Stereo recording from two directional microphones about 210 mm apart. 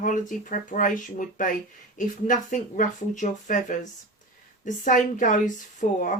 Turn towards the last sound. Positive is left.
turn(degrees=35)  # may be behind; listen again after turning